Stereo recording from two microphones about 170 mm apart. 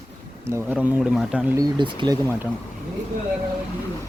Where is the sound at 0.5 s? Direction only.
5° right (ahead or behind).